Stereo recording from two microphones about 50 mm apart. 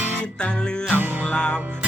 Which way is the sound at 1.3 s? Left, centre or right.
Left.